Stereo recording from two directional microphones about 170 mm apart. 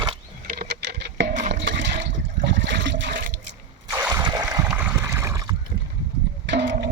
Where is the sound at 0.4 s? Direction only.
65° right (ahead or behind); by 1.3 s 85° right.